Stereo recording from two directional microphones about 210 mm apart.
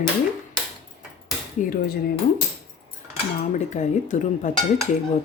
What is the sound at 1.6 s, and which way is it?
Speech, 40° left (ahead or behind).